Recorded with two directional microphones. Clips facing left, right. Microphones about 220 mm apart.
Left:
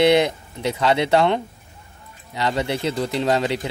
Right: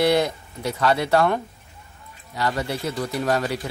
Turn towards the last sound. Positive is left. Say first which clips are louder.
# left 3 dB
turn(degrees=20)  # may be behind; listen again after turning